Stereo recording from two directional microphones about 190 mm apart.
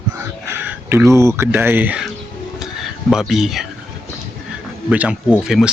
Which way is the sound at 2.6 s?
Centre (ahead or behind).